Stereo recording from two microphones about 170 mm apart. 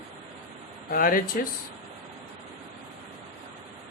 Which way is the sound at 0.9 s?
55° left (ahead or behind).